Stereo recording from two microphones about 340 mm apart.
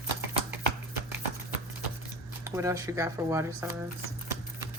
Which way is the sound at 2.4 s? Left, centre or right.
Centre.